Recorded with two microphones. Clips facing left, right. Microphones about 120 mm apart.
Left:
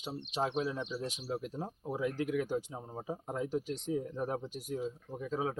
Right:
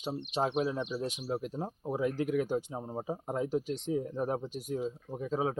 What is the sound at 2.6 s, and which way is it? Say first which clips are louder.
Speech: right 4 dB; 20° right (ahead or behind).